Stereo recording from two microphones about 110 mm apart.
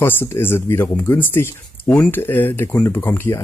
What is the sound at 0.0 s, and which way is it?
Speech, 20° left (ahead or behind).